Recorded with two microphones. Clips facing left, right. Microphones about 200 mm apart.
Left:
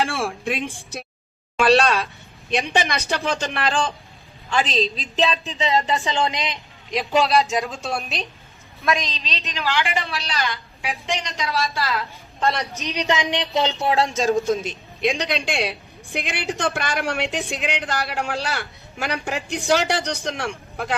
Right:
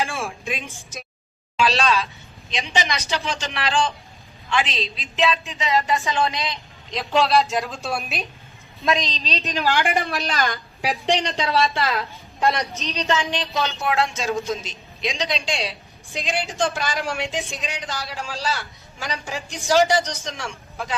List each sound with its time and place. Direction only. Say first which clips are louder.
0.2 s a woman's voice: left 4 dB; 65° left (ahead or behind)
4.4 s a woman's voice: left 3 dB; 40° left (ahead or behind); by 7.0 s 15° left (ahead or behind)
7.0 s a woman's voice: even; centre (ahead or behind)
8.9 s a woman's voice: right 1 dB; 35° right (ahead or behind)
12.7 s speech: left 1 dB; 15° left (ahead or behind); by 14.3 s 40° left (ahead or behind)
14.5 s a woman's voice: left 5 dB; 55° left (ahead or behind)